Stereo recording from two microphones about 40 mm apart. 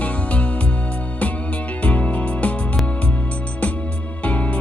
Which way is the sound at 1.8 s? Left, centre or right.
Left.